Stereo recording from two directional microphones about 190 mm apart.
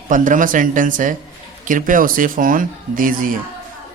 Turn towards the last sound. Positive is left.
turn(degrees=-45)  # may be behind; listen again after turning